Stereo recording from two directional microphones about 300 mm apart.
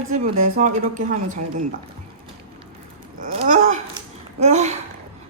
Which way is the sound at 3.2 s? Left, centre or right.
Right.